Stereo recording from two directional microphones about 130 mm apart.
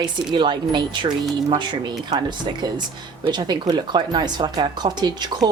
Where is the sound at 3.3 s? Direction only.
35° right (ahead or behind).